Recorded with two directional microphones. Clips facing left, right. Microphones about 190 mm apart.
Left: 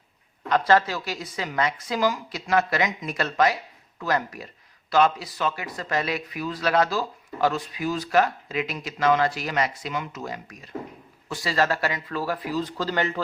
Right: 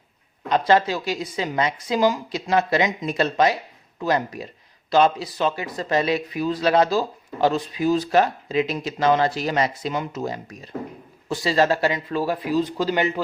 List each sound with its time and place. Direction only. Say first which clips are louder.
0.7 s speech: right 3 dB; 20° right (ahead or behind)